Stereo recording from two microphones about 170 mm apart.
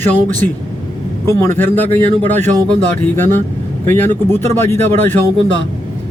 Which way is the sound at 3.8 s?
15° left (ahead or behind).